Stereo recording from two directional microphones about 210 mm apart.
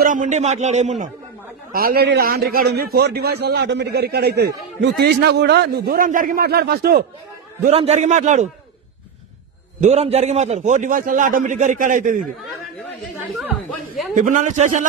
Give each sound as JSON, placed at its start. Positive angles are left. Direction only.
{"t": 0.0, "sound": "a man's voice", "side_deg": -40}
{"t": 1.7, "sound": "a man's voice", "side_deg": -45}
{"t": 7.7, "sound": "a man's voice", "side_deg": -30}
{"t": 9.8, "sound": "a man's voice", "side_deg": -30}
{"t": 13.3, "sound": "a sound", "side_deg": 0}
{"t": 14.1, "sound": "a man's voice", "side_deg": -40}